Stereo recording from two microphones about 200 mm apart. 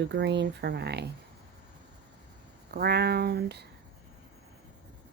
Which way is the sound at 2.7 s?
55° right (ahead or behind).